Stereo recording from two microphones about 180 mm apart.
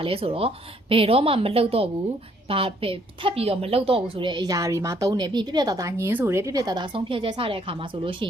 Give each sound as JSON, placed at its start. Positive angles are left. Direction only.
{"t": 0.0, "sound": "a woman's voice", "side_deg": -30}